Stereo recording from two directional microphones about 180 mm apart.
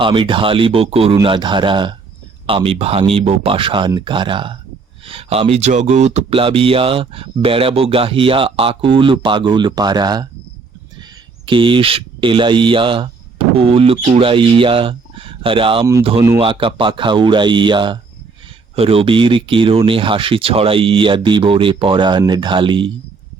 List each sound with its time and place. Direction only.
0.0 s speech: 30° right (ahead or behind)
11.4 s speech: 30° right (ahead or behind)